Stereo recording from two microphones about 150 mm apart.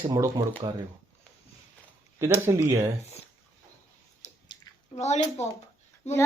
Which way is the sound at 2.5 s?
20° right (ahead or behind).